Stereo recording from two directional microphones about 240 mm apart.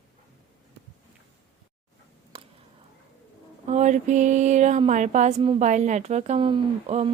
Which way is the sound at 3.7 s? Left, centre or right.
Right.